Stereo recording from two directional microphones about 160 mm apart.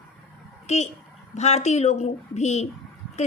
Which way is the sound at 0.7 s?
45° left (ahead or behind).